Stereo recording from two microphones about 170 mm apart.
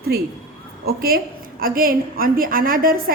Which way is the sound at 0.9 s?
60° right (ahead or behind).